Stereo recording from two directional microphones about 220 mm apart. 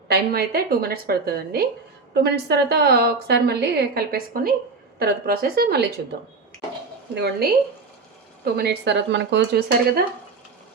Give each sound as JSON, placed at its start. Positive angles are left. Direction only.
{"t": 0.1, "sound": "a woman's voice", "side_deg": -45}
{"t": 7.2, "sound": "a woman's voice", "side_deg": -45}
{"t": 8.5, "sound": "a woman's voice", "side_deg": -50}